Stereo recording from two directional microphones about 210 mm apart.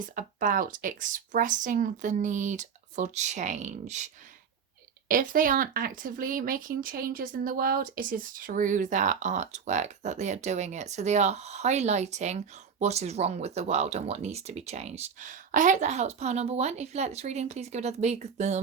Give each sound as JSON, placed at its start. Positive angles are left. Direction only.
{"t": 0.0, "sound": "speech", "side_deg": -40}